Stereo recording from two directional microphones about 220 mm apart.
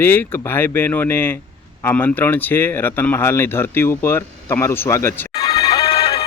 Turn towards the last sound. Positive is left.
turn(degrees=25)  # may be behind; listen again after turning